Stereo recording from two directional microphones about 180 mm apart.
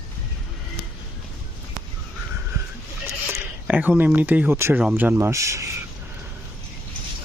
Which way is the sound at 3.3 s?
10° right (ahead or behind).